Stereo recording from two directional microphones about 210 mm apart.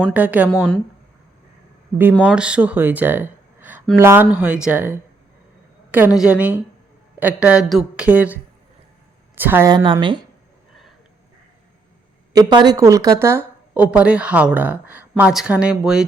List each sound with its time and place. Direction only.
0.1 s a woman's voice: 5° right (ahead or behind)
0.5 s speech: 5° left (ahead or behind)
2.2 s a woman's voice: 5° right (ahead or behind); by 10.2 s 25° right (ahead or behind)
12.3 s a woman's voice: 20° right (ahead or behind); by 16.0 s 5° right (ahead or behind)